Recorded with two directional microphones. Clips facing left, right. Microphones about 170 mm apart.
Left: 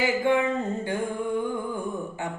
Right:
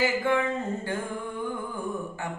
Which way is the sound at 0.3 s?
20° left (ahead or behind).